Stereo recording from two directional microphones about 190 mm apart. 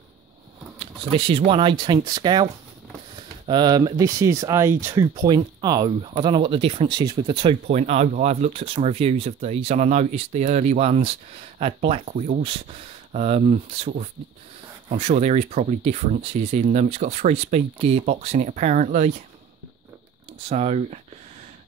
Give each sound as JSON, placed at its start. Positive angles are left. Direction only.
{"t": 0.7, "sound": "speech", "side_deg": -30}
{"t": 7.6, "sound": "speech", "side_deg": -40}
{"t": 12.1, "sound": "speech", "side_deg": -45}
{"t": 12.4, "sound": "speech", "side_deg": -30}
{"t": 14.9, "sound": "speech", "side_deg": -35}
{"t": 20.4, "sound": "speech", "side_deg": -35}